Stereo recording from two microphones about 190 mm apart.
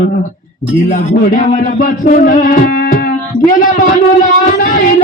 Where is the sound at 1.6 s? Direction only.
45° left (ahead or behind).